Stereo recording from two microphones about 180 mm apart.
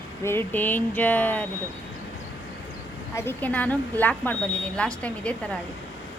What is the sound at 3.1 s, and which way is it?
Speech, 10° left (ahead or behind).